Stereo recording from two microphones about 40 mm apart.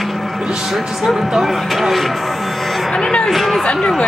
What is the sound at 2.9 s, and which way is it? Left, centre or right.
Speech, left.